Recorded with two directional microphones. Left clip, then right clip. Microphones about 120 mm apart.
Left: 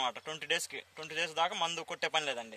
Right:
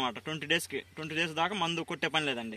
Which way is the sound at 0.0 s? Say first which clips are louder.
Right 2 dB; 25° left (ahead or behind).